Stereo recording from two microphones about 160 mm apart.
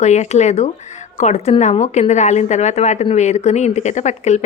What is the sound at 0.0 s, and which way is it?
A woman's voice, 45° left (ahead or behind).